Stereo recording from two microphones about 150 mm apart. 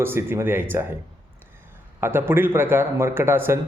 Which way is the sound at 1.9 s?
15° right (ahead or behind).